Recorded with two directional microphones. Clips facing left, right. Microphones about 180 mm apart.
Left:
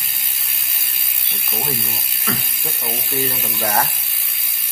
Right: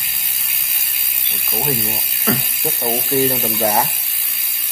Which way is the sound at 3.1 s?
45° right (ahead or behind).